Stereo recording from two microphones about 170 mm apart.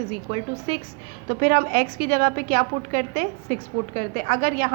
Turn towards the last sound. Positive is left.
turn(degrees=-55)  # may be behind; listen again after turning